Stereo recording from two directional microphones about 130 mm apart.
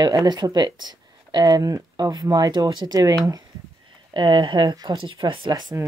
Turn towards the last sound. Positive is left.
turn(degrees=-30)  # may be behind; listen again after turning